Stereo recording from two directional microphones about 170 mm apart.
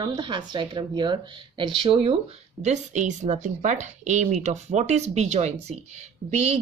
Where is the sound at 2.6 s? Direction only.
45° right (ahead or behind).